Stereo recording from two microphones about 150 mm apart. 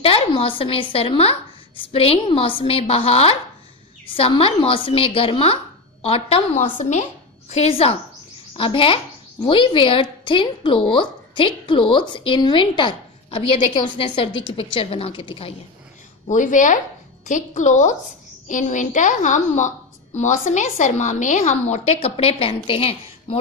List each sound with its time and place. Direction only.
0.0 s a woman's voice: 40° left (ahead or behind)
16.3 s a woman's voice: 55° left (ahead or behind); by 23.3 s 40° left (ahead or behind)